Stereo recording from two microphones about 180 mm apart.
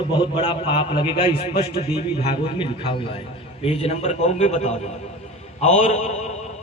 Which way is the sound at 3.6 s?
35° left (ahead or behind).